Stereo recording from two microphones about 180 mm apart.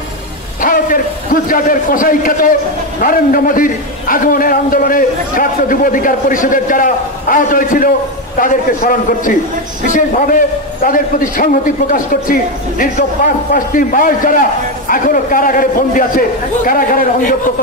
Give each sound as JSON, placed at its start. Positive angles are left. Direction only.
{"t": 0.6, "sound": "a man's voice", "side_deg": 50}